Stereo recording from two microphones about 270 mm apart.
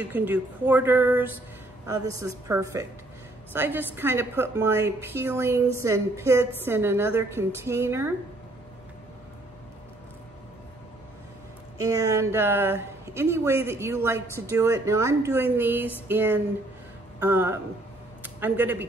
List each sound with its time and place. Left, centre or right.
0.0 s speech: centre
11.8 s speech: centre